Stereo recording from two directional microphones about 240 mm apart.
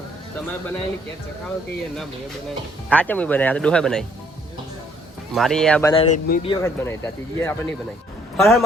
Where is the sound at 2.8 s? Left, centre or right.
Centre.